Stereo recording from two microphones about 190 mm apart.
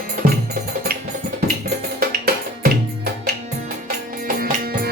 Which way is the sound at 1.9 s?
50° right (ahead or behind).